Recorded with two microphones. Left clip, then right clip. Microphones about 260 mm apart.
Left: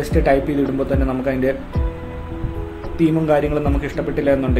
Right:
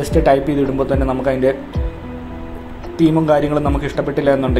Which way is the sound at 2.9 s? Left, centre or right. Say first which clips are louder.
Right 3 dB; centre.